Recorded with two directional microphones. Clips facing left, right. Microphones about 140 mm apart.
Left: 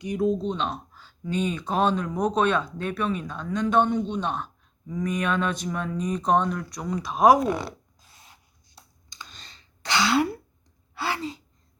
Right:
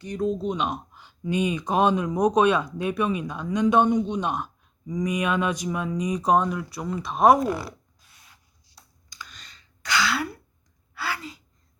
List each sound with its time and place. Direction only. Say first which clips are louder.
0.0 s speech: left 2 dB; 5° left (ahead or behind)
9.0 s clicking: right 1 dB; 25° left (ahead or behind)
10.9 s gasp: left 3 dB; 25° left (ahead or behind)